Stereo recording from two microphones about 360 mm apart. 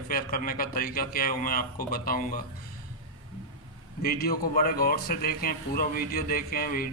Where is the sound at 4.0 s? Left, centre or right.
Left.